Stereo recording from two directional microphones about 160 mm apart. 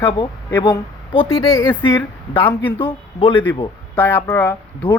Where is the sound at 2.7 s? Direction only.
30° left (ahead or behind).